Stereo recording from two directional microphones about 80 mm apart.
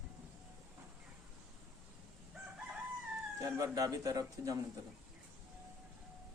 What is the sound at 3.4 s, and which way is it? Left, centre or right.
Speech, right.